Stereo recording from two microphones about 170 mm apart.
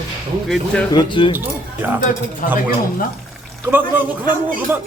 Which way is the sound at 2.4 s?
55° left (ahead or behind).